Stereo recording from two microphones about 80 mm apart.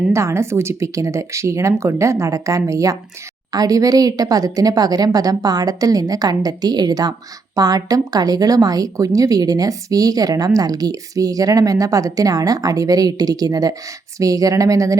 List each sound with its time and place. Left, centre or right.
0.1 s speech: right